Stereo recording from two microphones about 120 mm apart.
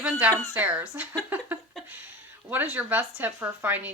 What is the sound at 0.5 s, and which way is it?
Speech, 15° right (ahead or behind).